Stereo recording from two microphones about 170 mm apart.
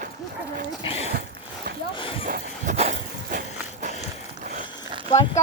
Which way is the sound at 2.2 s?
45° right (ahead or behind).